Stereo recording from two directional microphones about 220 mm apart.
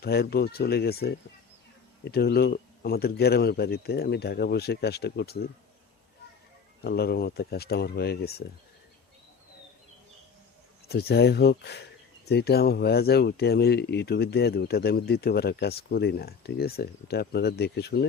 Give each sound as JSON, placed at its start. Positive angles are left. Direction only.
{"t": 0.0, "sound": "speech", "side_deg": 45}
{"t": 6.8, "sound": "speech", "side_deg": 45}
{"t": 10.8, "sound": "speech", "side_deg": 45}